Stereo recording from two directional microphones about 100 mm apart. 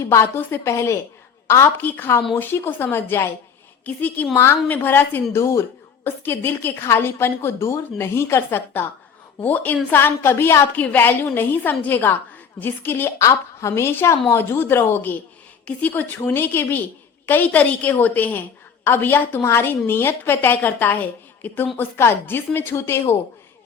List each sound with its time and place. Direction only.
0.0 s a woman's voice: 25° left (ahead or behind)